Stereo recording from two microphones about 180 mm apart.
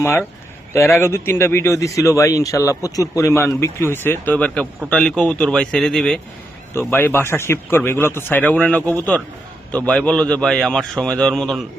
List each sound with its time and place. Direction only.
0.0 s a man's voice: 15° left (ahead or behind)
6.7 s a man's voice: 10° left (ahead or behind)